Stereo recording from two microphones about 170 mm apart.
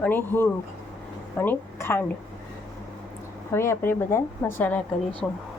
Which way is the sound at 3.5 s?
15° left (ahead or behind).